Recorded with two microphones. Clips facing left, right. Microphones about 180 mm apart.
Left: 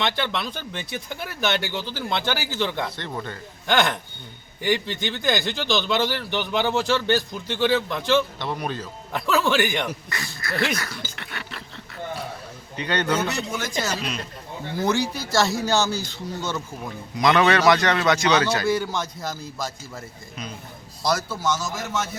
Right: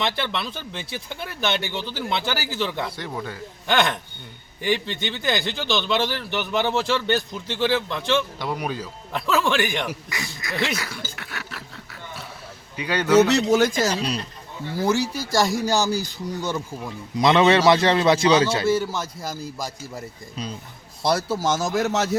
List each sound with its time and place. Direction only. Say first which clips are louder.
0.0 s speech: even; 5° right (ahead or behind)
8.4 s speech: right 1 dB; 10° right (ahead or behind)
9.1 s speech: even; centre (ahead or behind)
10.1 s speech: even; 15° right (ahead or behind)
10.6 s speech: even; 5° right (ahead or behind)
11.2 s a sound: even; 5° right (ahead or behind)
12.7 s speech: right 2 dB; 10° right (ahead or behind)
13.1 s a man's voice: right 11 dB; 80° right
13.7 s speech: right 4 dB; 35° right (ahead or behind)
14.8 s speech: right 1 dB; 10° right (ahead or behind)
17.2 s a man's voice: right 2 dB; 25° right (ahead or behind)
18.7 s speech: right 1 dB; 5° right (ahead or behind)
20.3 s speech: right 3 dB; 30° right (ahead or behind); by 22.2 s 80° right